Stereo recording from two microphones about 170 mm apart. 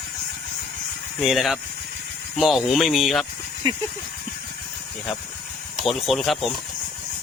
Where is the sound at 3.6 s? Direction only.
30° right (ahead or behind).